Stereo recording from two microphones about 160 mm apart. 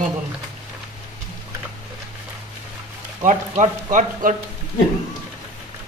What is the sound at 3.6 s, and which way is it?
Speech, 50° right (ahead or behind).